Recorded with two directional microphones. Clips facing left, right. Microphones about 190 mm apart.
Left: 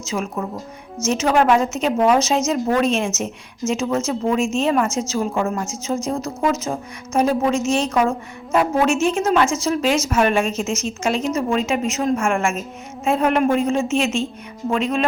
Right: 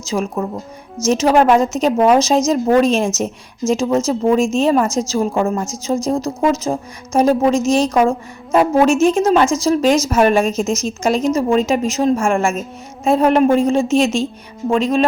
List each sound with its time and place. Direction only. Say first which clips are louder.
0.0 s a woman's voice: right 4 dB; 35° right (ahead or behind)